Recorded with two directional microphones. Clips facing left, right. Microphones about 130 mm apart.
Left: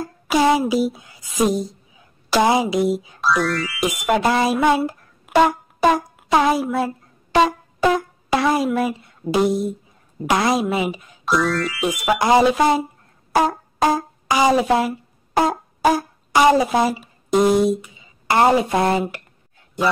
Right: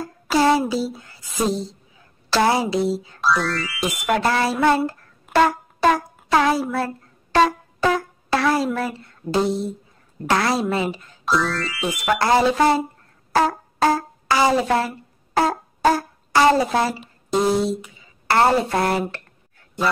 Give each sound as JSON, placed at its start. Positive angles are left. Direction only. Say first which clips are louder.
{"t": 0.0, "sound": "speech", "louder": "left 1 dB", "side_deg": 15}
{"t": 4.0, "sound": "a woman's voice", "louder": "left 2 dB", "side_deg": 15}
{"t": 5.2, "sound": "a sound", "louder": "left 2 dB", "side_deg": 15}
{"t": 10.2, "sound": "a woman's voice", "louder": "left 2 dB", "side_deg": 15}
{"t": 11.2, "sound": "a woman's voice", "louder": "left 2 dB", "side_deg": 0}
{"t": 13.3, "sound": "music", "louder": "left 1 dB", "side_deg": 15}
{"t": 18.2, "sound": "a woman's voice", "louder": "left 2 dB", "side_deg": 15}